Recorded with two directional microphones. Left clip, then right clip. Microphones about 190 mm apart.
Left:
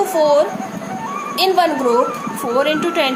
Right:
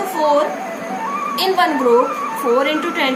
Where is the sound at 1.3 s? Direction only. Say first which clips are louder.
Left 2 dB; 60° left (ahead or behind).